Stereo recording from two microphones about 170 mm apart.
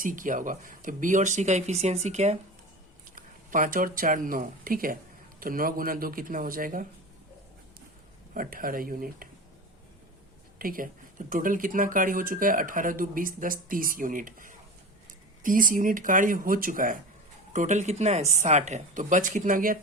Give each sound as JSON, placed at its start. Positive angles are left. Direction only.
{"t": 0.0, "sound": "speech", "side_deg": -50}
{"t": 3.2, "sound": "speech", "side_deg": -55}
{"t": 8.3, "sound": "speech", "side_deg": -55}
{"t": 10.6, "sound": "speech", "side_deg": -55}